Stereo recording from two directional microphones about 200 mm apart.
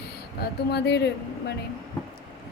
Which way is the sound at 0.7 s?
55° left (ahead or behind).